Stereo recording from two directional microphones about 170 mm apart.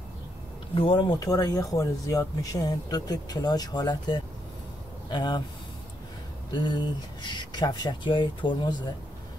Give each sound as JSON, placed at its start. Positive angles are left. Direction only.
{"t": 0.7, "sound": "speech", "side_deg": 30}
{"t": 6.5, "sound": "speech", "side_deg": 25}